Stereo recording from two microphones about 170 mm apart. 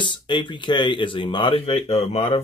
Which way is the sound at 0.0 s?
30° left (ahead or behind).